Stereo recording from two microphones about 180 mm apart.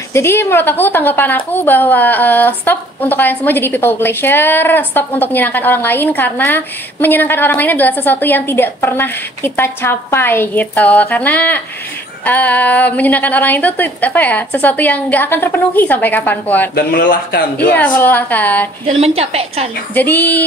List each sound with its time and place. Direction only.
0.1 s a woman's voice: 15° left (ahead or behind)
16.7 s speech: 50° left (ahead or behind)
17.7 s a woman's voice: 10° left (ahead or behind)
18.9 s a woman's voice: 35° right (ahead or behind)
19.9 s a woman's voice: 10° left (ahead or behind)